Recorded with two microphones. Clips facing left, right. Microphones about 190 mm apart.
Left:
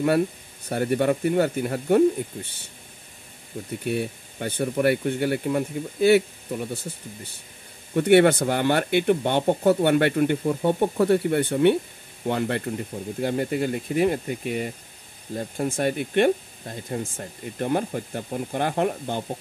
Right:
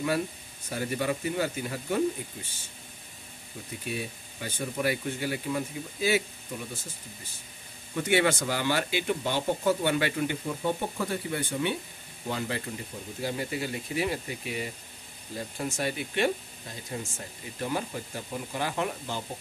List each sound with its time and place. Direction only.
0.7 s speech: 60° left (ahead or behind)
3.8 s speech: 60° left (ahead or behind)